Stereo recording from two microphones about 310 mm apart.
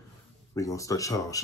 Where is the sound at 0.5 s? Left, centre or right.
Centre.